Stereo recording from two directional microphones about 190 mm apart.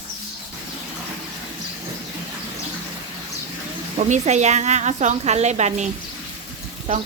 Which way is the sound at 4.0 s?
40° right (ahead or behind).